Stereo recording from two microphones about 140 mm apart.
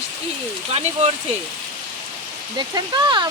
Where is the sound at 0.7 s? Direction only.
50° right (ahead or behind).